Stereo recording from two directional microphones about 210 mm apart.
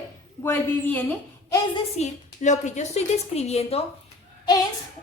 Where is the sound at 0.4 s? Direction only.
10° left (ahead or behind).